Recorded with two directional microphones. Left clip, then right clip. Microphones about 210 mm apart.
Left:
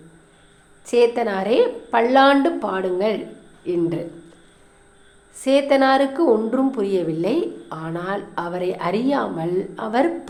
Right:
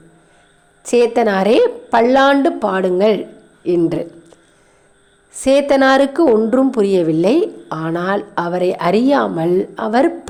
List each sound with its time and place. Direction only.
0.9 s a woman's voice: 35° right (ahead or behind)
5.4 s a woman's voice: 35° right (ahead or behind)